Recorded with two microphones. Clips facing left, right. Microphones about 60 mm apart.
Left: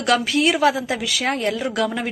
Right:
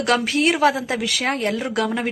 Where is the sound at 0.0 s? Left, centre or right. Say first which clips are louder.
Even; right.